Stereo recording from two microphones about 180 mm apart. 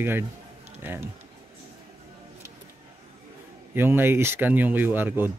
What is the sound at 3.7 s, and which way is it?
A man's voice, 10° right (ahead or behind).